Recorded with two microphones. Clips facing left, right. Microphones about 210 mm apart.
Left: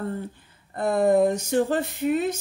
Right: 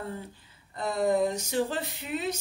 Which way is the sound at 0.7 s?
55° left (ahead or behind).